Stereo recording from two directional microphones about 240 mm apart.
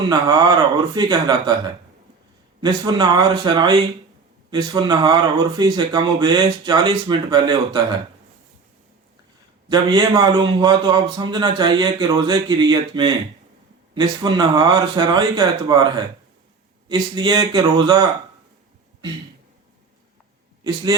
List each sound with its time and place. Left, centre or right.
0.1 s a man's voice: centre
2.6 s a man's voice: centre
9.6 s a man's voice: centre
16.9 s a man's voice: centre